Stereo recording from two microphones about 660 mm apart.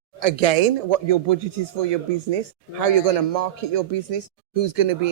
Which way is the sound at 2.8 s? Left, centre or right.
Right.